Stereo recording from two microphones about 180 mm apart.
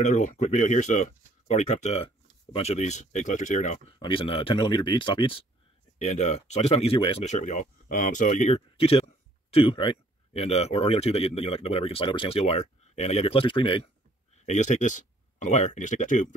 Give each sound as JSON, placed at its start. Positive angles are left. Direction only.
{"t": 0.0, "sound": "speech", "side_deg": 45}
{"t": 4.0, "sound": "speech", "side_deg": 30}
{"t": 6.0, "sound": "speech", "side_deg": 40}
{"t": 14.4, "sound": "speech", "side_deg": 40}